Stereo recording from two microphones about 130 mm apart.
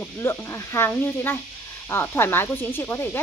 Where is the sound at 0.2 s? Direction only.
20° left (ahead or behind).